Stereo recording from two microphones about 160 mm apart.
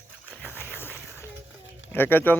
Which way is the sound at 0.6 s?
15° left (ahead or behind).